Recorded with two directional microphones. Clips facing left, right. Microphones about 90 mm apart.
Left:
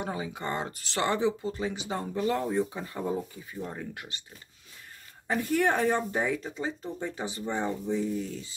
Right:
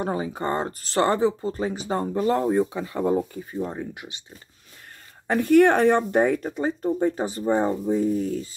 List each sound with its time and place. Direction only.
0.0 s speech: 40° right (ahead or behind)
2.7 s speech: 90° right
3.6 s speech: 15° right (ahead or behind)
5.3 s speech: 65° right (ahead or behind); by 8.5 s 45° right (ahead or behind)